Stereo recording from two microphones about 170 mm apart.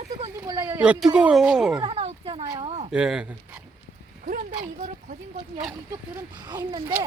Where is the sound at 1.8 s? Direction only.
35° right (ahead or behind).